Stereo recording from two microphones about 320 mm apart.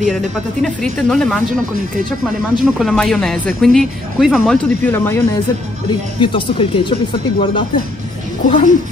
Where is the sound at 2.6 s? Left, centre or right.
Centre.